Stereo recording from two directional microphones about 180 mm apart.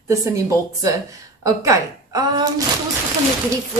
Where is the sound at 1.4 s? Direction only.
20° right (ahead or behind).